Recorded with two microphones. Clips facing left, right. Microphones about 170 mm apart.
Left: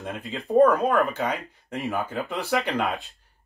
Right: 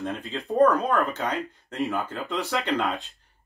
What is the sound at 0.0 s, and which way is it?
Speech, 5° left (ahead or behind).